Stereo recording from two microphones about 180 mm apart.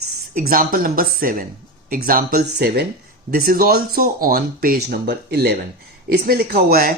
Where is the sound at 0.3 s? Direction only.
50° right (ahead or behind).